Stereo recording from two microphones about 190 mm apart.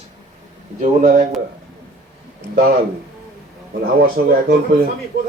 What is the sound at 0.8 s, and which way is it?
Speech, 40° right (ahead or behind).